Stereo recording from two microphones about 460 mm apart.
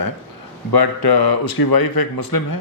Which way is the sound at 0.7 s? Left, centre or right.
Left.